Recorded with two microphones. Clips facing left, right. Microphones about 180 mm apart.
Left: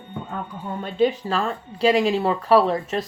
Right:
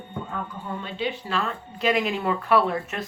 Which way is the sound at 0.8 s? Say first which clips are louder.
Left 11 dB; 45° left (ahead or behind).